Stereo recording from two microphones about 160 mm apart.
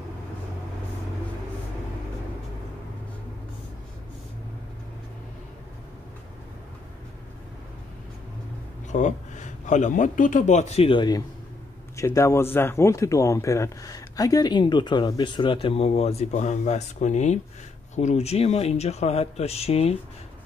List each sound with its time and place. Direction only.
8.9 s speech: 50° left (ahead or behind)